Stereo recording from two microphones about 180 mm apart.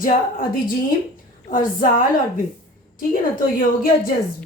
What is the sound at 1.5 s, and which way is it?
Speech, 50° left (ahead or behind).